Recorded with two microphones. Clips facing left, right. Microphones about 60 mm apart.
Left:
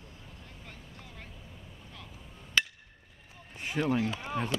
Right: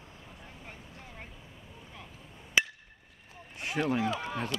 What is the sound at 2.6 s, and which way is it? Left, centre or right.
Hammer, centre.